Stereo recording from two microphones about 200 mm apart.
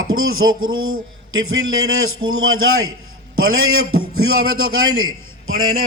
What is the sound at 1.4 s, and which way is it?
A man's voice, 90° right.